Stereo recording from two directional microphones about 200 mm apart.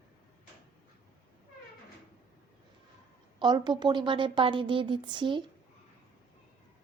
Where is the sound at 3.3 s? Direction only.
20° right (ahead or behind).